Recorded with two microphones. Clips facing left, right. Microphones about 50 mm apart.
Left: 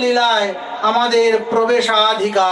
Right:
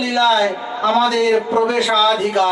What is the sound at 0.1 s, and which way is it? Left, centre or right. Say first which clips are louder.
A man's voice: right 4 dB; left.